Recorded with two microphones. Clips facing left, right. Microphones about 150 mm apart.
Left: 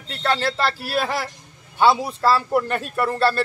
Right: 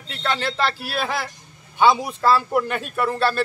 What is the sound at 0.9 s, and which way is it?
A man's voice, 10° left (ahead or behind).